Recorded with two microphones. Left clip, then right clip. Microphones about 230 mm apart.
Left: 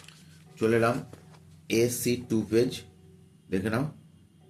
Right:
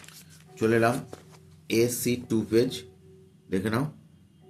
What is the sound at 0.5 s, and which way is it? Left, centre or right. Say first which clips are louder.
A man's voice: right 1 dB; centre.